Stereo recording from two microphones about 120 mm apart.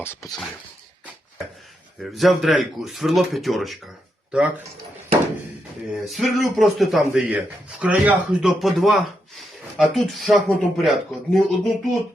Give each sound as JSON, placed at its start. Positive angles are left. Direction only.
{"t": 0.0, "sound": "speech", "side_deg": 25}
{"t": 2.0, "sound": "speech", "side_deg": 0}
{"t": 5.9, "sound": "speech", "side_deg": 0}